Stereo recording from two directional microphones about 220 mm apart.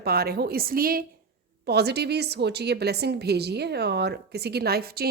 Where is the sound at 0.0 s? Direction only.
45° right (ahead or behind).